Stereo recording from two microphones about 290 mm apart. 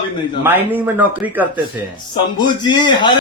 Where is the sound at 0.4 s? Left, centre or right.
Centre.